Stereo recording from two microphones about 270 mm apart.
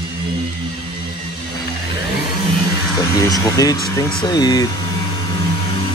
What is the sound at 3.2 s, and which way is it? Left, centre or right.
Speech, centre.